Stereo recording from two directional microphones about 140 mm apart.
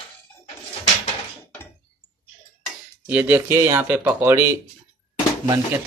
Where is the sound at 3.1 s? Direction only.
15° right (ahead or behind).